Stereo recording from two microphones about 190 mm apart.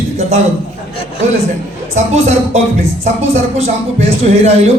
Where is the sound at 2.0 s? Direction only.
35° right (ahead or behind).